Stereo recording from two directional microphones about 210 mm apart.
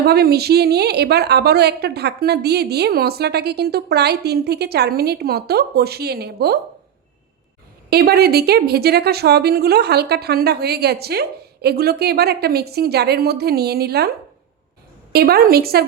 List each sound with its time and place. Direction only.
0.0 s a woman's voice: 50° right (ahead or behind)
7.9 s a woman's voice: 50° right (ahead or behind)
15.1 s a woman's voice: 50° right (ahead or behind)